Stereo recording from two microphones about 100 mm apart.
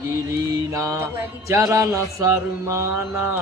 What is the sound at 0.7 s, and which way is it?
Mantra, 30° right (ahead or behind).